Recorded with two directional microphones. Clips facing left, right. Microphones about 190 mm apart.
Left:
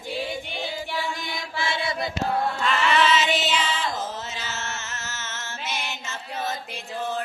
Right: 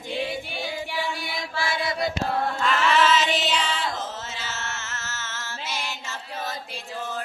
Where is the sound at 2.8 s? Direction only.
5° right (ahead or behind).